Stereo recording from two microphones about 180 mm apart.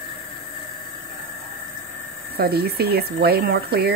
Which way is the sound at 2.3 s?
60° right (ahead or behind).